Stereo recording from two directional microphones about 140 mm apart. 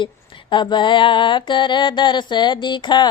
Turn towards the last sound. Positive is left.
turn(degrees=35)  # may be behind; listen again after turning